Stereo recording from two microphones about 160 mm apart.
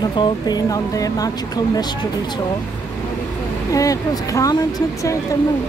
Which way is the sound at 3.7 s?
20° left (ahead or behind).